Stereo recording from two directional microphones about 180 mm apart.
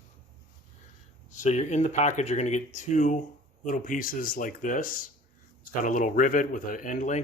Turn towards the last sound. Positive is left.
turn(degrees=45)  # may be behind; listen again after turning